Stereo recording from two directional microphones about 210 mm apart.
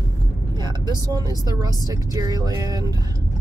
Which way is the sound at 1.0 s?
20° right (ahead or behind).